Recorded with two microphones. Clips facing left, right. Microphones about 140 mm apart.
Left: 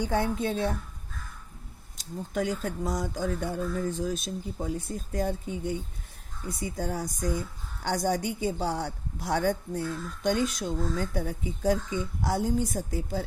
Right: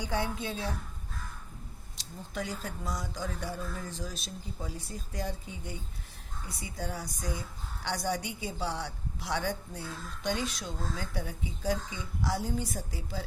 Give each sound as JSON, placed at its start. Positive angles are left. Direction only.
{"t": 0.0, "sound": "a woman's voice", "side_deg": 50}
{"t": 2.0, "sound": "a woman's voice", "side_deg": 50}